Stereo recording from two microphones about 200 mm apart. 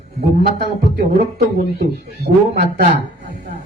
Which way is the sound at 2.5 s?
50° right (ahead or behind).